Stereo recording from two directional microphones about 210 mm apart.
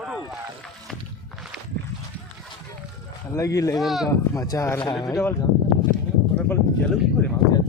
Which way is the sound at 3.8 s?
Centre (ahead or behind).